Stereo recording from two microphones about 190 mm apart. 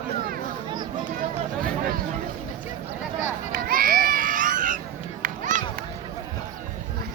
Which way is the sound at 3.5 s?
50° right (ahead or behind).